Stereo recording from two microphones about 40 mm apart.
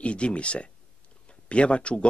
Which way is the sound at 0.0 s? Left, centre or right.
Left.